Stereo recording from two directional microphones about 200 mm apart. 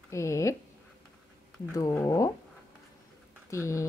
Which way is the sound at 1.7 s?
15° left (ahead or behind).